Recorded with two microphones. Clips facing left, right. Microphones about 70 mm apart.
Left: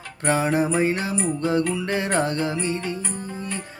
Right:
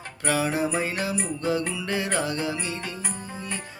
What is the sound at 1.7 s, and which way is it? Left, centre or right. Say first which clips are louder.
Music: left 4 dB; left.